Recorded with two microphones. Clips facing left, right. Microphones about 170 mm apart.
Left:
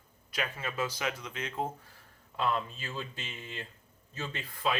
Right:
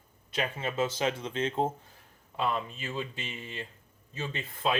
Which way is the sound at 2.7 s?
15° right (ahead or behind).